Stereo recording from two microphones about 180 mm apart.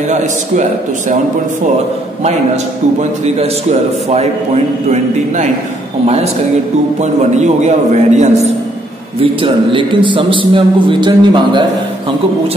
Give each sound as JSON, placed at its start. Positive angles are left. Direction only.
{"t": 0.1, "sound": "a man's voice", "side_deg": -40}
{"t": 2.2, "sound": "a man's voice", "side_deg": -40}
{"t": 4.9, "sound": "a man's voice", "side_deg": -40}
{"t": 9.2, "sound": "a man's voice", "side_deg": -30}